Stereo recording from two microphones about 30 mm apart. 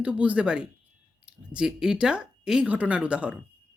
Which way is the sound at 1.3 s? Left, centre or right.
Right.